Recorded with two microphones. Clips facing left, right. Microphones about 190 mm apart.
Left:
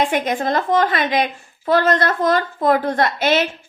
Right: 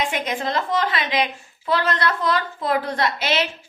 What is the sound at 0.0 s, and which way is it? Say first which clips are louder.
A woman's voice: left 5 dB; 50° left (ahead or behind).